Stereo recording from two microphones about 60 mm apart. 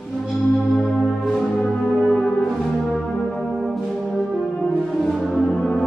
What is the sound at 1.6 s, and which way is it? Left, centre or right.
Brass instrument, centre.